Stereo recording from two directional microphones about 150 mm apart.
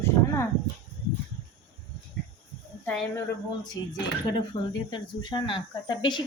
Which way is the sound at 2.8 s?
10° left (ahead or behind).